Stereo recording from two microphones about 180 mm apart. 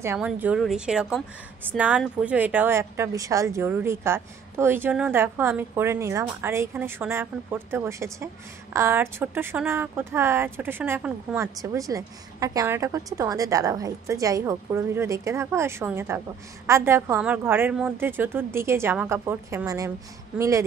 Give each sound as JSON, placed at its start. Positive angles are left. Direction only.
{"t": 0.0, "sound": "a woman's voice", "side_deg": -10}